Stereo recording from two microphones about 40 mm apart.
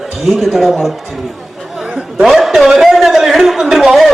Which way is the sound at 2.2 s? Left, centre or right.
Centre.